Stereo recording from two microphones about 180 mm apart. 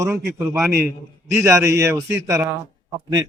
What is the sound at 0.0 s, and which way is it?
Speech, 15° right (ahead or behind).